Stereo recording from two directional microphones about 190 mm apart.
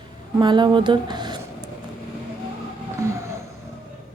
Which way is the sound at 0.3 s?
25° right (ahead or behind).